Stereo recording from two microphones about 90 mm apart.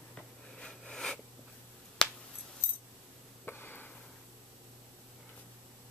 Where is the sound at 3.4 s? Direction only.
20° left (ahead or behind).